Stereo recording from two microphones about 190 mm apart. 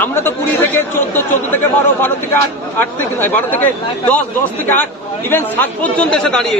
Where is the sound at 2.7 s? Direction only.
10° left (ahead or behind).